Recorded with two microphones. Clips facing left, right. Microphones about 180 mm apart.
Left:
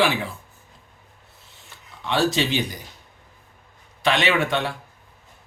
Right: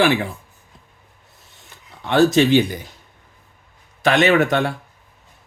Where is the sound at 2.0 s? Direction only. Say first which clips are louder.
Right 7 dB; 50° right (ahead or behind).